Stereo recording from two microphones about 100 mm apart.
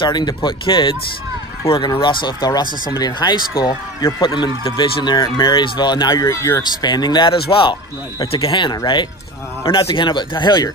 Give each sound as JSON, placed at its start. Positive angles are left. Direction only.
{"t": 0.0, "sound": "speech", "side_deg": 45}
{"t": 6.2, "sound": "speech", "side_deg": 30}
{"t": 6.8, "sound": "speech", "side_deg": 45}